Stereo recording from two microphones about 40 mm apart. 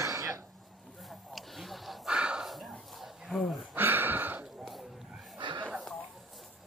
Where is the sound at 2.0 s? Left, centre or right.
Right.